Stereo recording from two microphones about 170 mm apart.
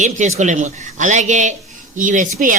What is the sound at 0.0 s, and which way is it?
A man's voice, 45° right (ahead or behind).